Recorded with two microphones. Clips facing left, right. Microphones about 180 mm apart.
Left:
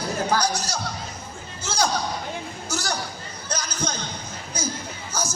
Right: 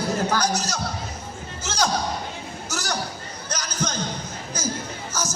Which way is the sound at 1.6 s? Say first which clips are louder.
Even; 30° left (ahead or behind).